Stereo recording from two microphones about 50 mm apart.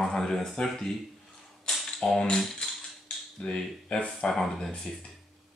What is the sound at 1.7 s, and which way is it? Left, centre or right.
Mechanisms, centre.